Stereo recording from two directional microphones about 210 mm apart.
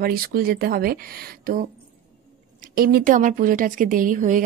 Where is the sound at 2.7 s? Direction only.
45° right (ahead or behind).